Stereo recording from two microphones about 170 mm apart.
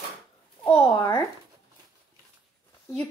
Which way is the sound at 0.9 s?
25° left (ahead or behind).